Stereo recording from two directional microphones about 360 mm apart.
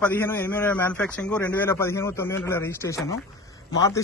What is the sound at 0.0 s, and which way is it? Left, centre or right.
A man's voice, centre.